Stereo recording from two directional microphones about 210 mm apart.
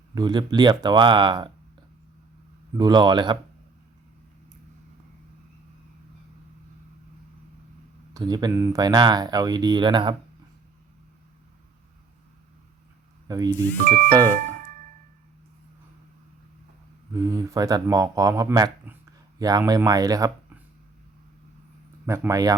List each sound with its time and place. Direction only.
0.1 s speech: 20° right (ahead or behind)
2.7 s speech: 20° right (ahead or behind)
8.1 s speech: 20° right (ahead or behind)
13.2 s speech: 15° right (ahead or behind)
17.2 s speech: 15° right (ahead or behind)
22.0 s speech: 15° right (ahead or behind)